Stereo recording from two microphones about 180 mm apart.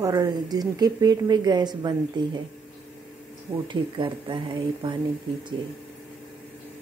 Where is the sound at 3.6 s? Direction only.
25° right (ahead or behind).